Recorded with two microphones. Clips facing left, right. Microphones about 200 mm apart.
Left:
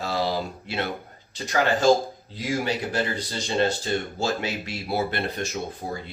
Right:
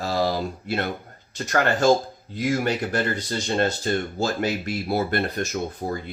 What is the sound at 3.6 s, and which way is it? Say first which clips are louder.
Speech: left 1 dB; 45° right (ahead or behind).